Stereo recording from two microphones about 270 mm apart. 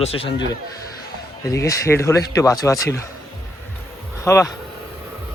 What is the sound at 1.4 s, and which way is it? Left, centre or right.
Speech, centre.